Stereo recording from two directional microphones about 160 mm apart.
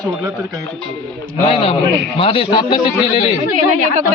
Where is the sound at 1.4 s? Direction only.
35° left (ahead or behind).